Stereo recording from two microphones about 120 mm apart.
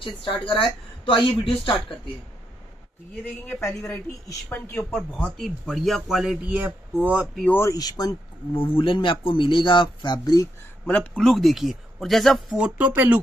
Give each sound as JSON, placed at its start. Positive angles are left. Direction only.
{"t": 0.5, "sound": "speech", "side_deg": 45}
{"t": 3.4, "sound": "speech", "side_deg": 20}
{"t": 4.9, "sound": "speech", "side_deg": 10}
{"t": 6.4, "sound": "speech", "side_deg": -10}
{"t": 7.4, "sound": "speech", "side_deg": 15}
{"t": 7.7, "sound": "speech", "side_deg": 35}
{"t": 8.5, "sound": "speech", "side_deg": 45}
{"t": 10.9, "sound": "speech", "side_deg": 10}
{"t": 11.2, "sound": "speech", "side_deg": 0}